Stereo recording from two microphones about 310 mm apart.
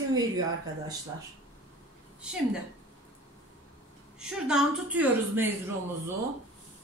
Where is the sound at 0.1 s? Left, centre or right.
Centre.